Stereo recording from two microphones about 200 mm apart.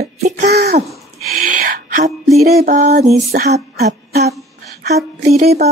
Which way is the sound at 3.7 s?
50° right (ahead or behind).